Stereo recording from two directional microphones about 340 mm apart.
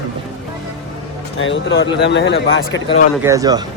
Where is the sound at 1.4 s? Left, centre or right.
Left.